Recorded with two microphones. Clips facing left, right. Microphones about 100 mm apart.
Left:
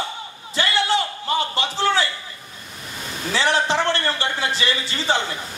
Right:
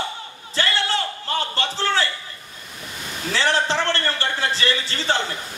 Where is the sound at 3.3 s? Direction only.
15° left (ahead or behind).